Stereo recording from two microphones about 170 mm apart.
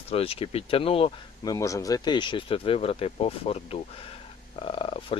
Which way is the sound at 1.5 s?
20° left (ahead or behind).